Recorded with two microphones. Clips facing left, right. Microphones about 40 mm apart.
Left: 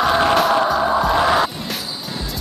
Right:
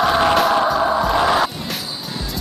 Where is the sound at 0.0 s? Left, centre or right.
Centre.